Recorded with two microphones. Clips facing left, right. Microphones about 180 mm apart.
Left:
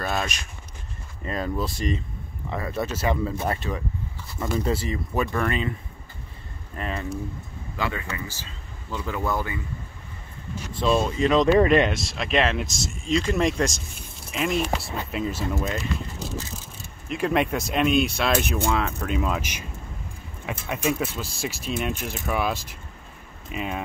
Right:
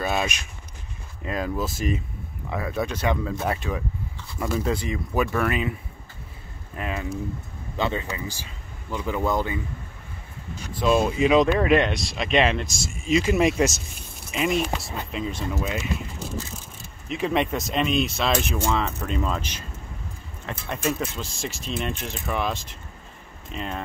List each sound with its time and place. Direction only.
0.0 s speech: 5° right (ahead or behind)
6.8 s speech: 5° right (ahead or behind)
7.7 s speech: 25° right (ahead or behind)
8.1 s speech: 15° right (ahead or behind)
10.8 s speech: 5° right (ahead or behind)
15.5 s speech: 10° right (ahead or behind)
16.2 s vehicle: centre (ahead or behind)
17.1 s speech: centre (ahead or behind)